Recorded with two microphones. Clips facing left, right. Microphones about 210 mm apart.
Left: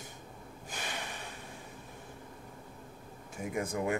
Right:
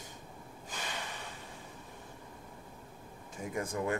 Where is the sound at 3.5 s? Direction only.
10° left (ahead or behind).